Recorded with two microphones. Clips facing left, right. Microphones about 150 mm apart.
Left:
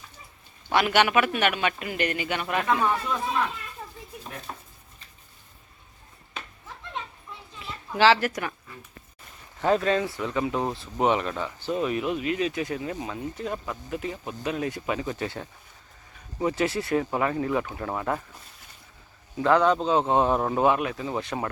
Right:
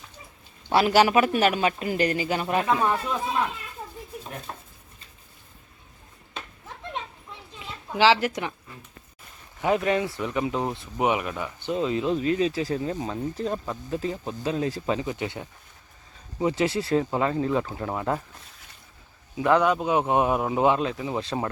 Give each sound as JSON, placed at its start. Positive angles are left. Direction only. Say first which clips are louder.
{"t": 0.7, "sound": "speech", "louder": "right 3 dB", "side_deg": -30}
{"t": 7.6, "sound": "a woman's voice", "louder": "even", "side_deg": -15}
{"t": 9.6, "sound": "speech", "louder": "even", "side_deg": -15}
{"t": 19.4, "sound": "speech", "louder": "even", "side_deg": -15}
{"t": 20.6, "sound": "speech", "louder": "right 1 dB", "side_deg": -25}